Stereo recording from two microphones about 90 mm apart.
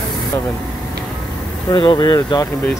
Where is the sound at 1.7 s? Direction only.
65° left (ahead or behind).